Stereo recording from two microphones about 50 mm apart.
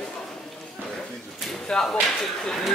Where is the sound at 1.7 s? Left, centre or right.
Centre.